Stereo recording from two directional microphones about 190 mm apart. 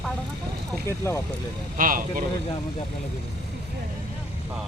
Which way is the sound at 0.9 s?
15° left (ahead or behind).